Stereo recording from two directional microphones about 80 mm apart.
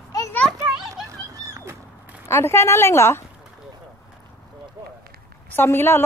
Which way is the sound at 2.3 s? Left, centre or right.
Left.